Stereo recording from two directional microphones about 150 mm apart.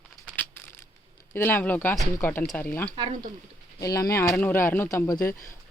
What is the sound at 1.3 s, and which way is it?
Speech, 15° left (ahead or behind).